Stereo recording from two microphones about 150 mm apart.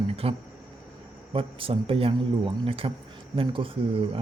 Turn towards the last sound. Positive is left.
turn(degrees=-35)  # may be behind; listen again after turning